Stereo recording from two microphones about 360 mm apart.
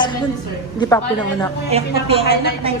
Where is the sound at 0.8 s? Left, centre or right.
Centre.